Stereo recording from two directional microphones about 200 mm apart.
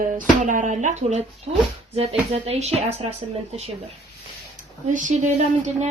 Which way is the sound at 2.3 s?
30° right (ahead or behind).